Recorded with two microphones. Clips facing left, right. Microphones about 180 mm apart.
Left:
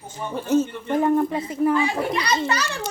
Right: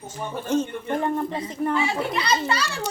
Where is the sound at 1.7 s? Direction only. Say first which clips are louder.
Left 2 dB; 25° right (ahead or behind).